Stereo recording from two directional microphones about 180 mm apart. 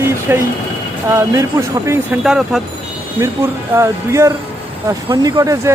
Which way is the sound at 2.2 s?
5° right (ahead or behind).